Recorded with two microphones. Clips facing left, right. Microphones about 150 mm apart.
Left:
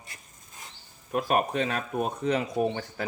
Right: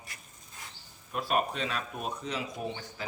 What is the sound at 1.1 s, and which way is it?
Speech, 50° left (ahead or behind).